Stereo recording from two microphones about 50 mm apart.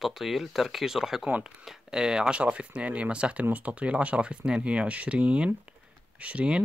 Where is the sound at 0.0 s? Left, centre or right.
Centre.